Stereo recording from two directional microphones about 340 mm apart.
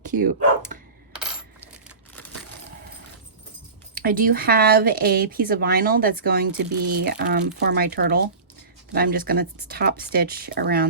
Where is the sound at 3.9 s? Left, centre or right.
Right.